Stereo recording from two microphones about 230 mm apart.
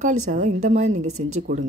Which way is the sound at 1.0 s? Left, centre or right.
Right.